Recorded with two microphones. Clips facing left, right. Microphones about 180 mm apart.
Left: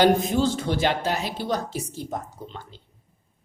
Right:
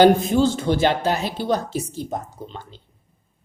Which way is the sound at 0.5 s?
25° right (ahead or behind).